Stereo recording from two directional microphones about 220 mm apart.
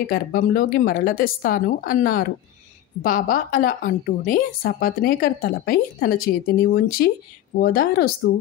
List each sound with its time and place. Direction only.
0.1 s a woman's voice: 40° left (ahead or behind)